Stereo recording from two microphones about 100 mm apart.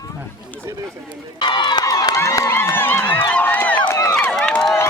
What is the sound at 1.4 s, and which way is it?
Crowd, 50° left (ahead or behind).